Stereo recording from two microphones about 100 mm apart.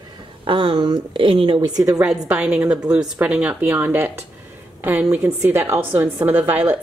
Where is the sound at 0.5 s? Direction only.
55° right (ahead or behind).